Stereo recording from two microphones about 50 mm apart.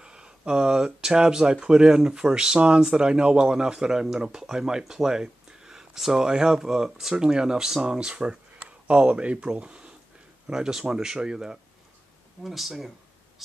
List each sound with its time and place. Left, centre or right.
0.0 s speech: centre
12.4 s speech: centre